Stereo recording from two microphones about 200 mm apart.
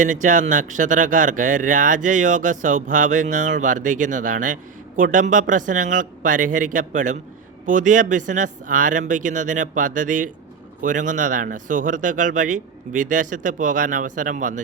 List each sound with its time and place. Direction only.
0.0 s speech: 40° right (ahead or behind)